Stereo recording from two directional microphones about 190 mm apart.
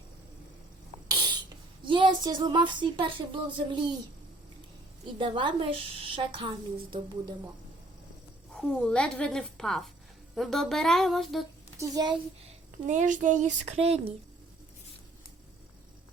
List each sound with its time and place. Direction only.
1.0 s a sound: 20° right (ahead or behind)
1.8 s speech: 25° right (ahead or behind)
5.2 s speech: 25° right (ahead or behind)
8.5 s a woman's voice: 5° left (ahead or behind)
11.8 s speech: 20° right (ahead or behind)
12.8 s speech: 40° right (ahead or behind)